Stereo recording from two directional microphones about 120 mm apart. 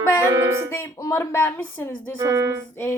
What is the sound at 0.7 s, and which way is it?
A woman's voice, 25° left (ahead or behind).